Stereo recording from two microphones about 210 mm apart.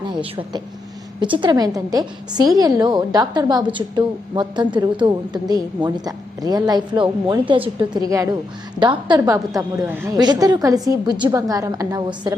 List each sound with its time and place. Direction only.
0.1 s a woman's voice: 25° right (ahead or behind)